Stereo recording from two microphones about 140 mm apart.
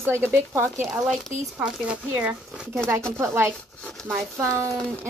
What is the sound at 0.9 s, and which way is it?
Speech, 5° right (ahead or behind).